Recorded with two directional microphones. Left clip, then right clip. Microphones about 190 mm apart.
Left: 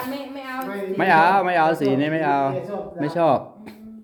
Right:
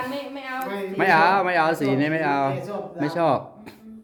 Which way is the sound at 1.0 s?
5° left (ahead or behind).